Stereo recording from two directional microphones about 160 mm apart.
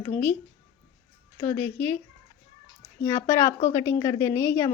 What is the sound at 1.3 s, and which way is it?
Speech, 15° left (ahead or behind).